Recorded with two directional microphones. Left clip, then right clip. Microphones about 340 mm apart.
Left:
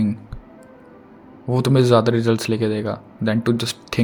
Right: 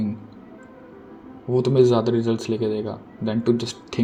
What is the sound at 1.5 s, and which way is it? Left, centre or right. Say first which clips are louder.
A man's voice: left 1 dB; left.